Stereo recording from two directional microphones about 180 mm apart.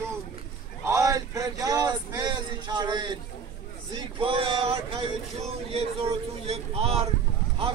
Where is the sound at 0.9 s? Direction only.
20° right (ahead or behind).